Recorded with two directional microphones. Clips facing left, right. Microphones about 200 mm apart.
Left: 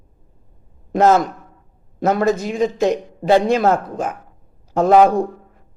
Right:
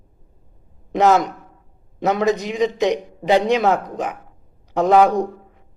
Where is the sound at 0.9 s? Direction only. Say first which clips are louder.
Left 1 dB; 20° right (ahead or behind).